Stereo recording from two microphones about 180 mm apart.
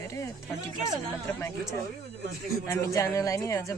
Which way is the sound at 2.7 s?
15° left (ahead or behind).